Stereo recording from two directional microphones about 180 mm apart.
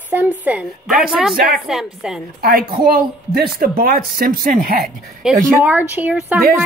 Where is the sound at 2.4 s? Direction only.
55° right (ahead or behind).